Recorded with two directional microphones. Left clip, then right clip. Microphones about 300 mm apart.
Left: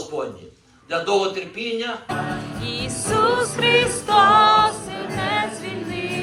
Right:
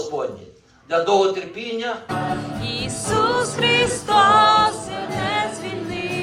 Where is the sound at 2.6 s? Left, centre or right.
Centre.